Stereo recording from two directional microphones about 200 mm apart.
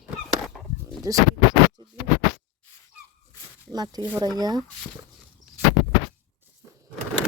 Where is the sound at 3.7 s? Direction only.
20° right (ahead or behind).